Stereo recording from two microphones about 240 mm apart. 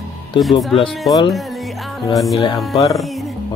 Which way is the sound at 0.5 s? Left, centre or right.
Left.